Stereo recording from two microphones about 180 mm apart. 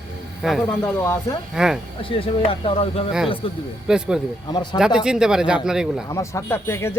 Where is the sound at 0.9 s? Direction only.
15° left (ahead or behind).